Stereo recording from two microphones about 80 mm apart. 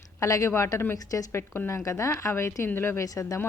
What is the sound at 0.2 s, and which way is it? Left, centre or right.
A woman's voice, left.